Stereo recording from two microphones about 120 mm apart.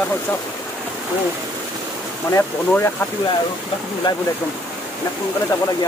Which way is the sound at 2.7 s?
15° left (ahead or behind).